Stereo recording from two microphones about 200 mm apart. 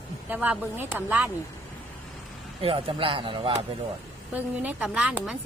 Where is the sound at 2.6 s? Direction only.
30° right (ahead or behind).